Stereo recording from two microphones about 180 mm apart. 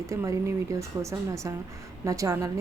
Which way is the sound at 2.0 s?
20° right (ahead or behind).